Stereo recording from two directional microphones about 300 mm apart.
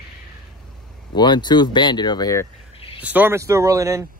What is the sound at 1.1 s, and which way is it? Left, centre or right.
Speech, centre.